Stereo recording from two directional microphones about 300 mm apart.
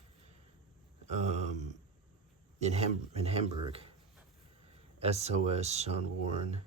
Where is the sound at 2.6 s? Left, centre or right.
Right.